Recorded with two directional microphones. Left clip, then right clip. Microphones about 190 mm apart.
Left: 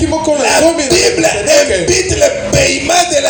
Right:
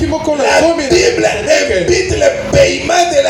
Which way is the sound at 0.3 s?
45° left (ahead or behind).